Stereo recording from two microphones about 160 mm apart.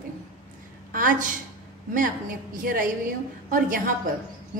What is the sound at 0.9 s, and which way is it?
A woman's voice, 55° right (ahead or behind).